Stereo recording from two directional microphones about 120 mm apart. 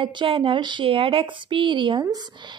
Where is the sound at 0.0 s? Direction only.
45° right (ahead or behind).